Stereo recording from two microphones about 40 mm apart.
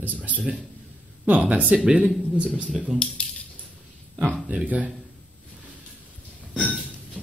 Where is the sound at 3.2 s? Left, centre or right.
Left.